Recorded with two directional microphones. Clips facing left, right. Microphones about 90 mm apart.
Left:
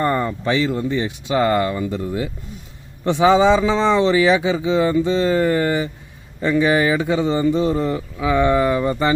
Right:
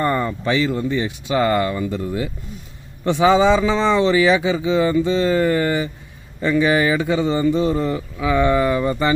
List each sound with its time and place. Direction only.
0.0 s speech: 30° left (ahead or behind)